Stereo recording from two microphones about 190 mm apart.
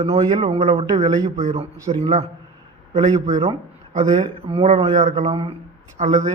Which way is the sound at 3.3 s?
35° right (ahead or behind).